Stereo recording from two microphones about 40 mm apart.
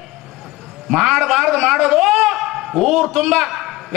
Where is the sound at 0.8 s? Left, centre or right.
Centre.